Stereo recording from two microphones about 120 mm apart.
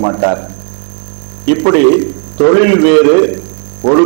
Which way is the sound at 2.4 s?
15° right (ahead or behind).